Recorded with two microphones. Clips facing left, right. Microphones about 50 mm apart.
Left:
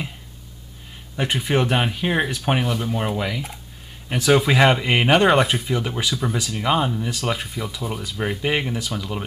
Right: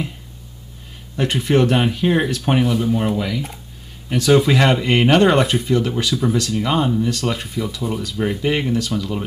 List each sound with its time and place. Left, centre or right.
1.1 s speech: centre